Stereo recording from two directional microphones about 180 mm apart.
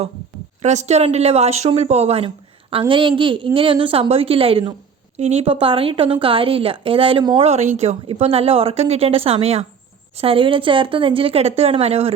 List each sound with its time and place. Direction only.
0.6 s a woman's voice: 40° right (ahead or behind)